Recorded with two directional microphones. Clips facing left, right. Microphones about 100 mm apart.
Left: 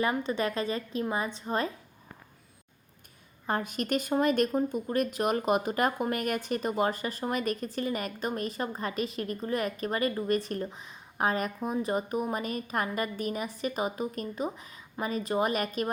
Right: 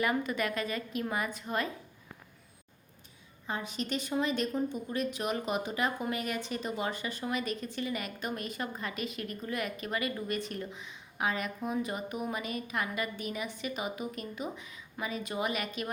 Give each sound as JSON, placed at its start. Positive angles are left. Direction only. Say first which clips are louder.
{"t": 0.0, "sound": "a woman's voice", "louder": "left 2 dB", "side_deg": 25}
{"t": 3.4, "sound": "speech", "louder": "left 5 dB", "side_deg": 50}